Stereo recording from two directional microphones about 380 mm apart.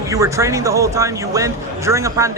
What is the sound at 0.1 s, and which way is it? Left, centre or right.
A man's voice, centre.